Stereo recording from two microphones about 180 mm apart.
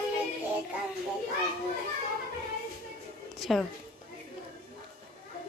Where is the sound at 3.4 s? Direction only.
Centre (ahead or behind).